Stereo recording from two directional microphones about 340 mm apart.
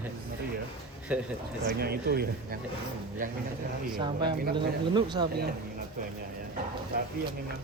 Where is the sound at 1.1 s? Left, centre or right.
Centre.